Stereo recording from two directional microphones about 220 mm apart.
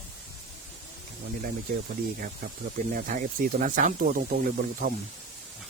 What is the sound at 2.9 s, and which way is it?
Speech, 35° right (ahead or behind).